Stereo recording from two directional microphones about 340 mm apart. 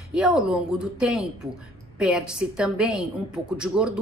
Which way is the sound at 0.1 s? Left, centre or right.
Centre.